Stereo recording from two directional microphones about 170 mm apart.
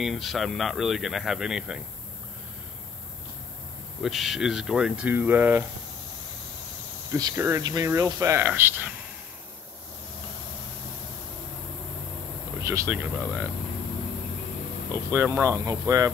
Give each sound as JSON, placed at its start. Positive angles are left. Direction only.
{"t": 0.0, "sound": "speech", "side_deg": 0}
{"t": 4.0, "sound": "speech", "side_deg": 0}
{"t": 7.1, "sound": "speech", "side_deg": -20}
{"t": 12.6, "sound": "speech", "side_deg": -15}
{"t": 14.9, "sound": "speech", "side_deg": -15}